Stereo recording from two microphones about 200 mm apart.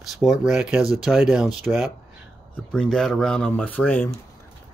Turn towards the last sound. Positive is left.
turn(degrees=10)  # may be behind; listen again after turning